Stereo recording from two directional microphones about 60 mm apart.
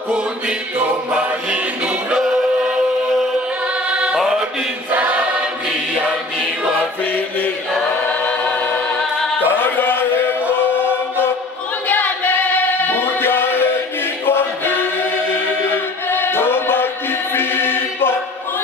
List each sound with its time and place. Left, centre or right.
1.1 s music: centre
3.9 s music: centre
4.9 s choir: centre
7.1 s chant: left
8.1 s choir: left
9.4 s a sound: left
11.9 s singing: left
14.2 s choir: left